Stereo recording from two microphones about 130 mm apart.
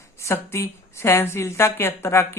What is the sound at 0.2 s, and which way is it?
A woman's voice, 20° left (ahead or behind).